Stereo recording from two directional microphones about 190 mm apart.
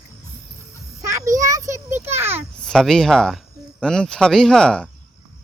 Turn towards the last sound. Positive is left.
turn(degrees=5)  # may be behind; listen again after turning